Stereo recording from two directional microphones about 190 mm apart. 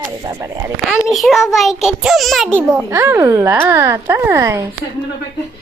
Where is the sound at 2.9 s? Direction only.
15° right (ahead or behind).